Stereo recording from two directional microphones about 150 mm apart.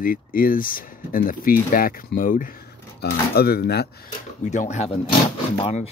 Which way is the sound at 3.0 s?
90° left.